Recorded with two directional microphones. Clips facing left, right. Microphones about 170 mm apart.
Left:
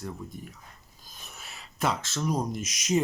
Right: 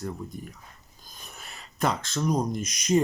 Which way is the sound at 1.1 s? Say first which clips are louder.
Right 1 dB; centre (ahead or behind).